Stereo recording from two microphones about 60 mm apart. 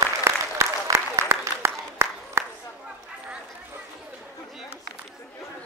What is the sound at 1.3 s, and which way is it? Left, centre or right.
Applause, right.